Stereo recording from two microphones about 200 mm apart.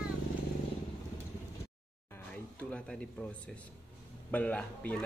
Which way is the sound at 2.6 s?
5° left (ahead or behind).